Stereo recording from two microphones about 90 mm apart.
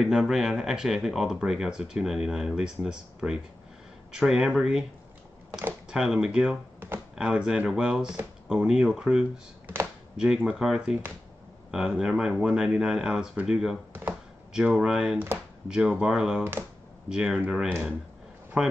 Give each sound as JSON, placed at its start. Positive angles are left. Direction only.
{"t": 0.0, "sound": "speech", "side_deg": -5}
{"t": 5.5, "sound": "speech", "side_deg": -20}
{"t": 5.9, "sound": "speech", "side_deg": -5}
{"t": 18.6, "sound": "speech", "side_deg": -5}